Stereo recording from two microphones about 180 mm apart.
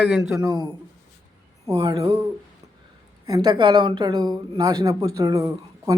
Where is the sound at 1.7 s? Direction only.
30° right (ahead or behind).